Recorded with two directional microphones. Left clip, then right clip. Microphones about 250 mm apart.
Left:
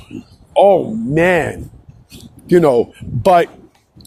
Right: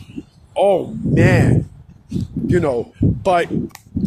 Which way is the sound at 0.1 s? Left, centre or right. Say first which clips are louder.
Left 7 dB; left.